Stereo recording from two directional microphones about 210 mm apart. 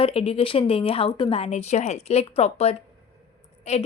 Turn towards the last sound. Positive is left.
turn(degrees=30)  # may be behind; listen again after turning